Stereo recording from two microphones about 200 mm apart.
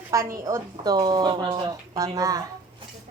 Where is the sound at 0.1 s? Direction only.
15° right (ahead or behind).